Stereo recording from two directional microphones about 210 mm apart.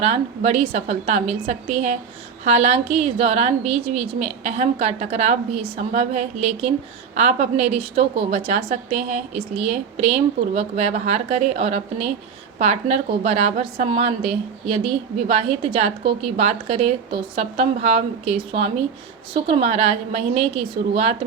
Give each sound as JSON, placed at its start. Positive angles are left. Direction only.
{"t": 0.0, "sound": "a woman's voice", "side_deg": -30}